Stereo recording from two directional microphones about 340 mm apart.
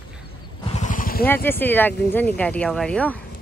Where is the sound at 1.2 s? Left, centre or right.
Centre.